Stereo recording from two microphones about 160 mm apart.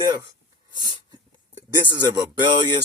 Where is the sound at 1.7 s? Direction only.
25° right (ahead or behind).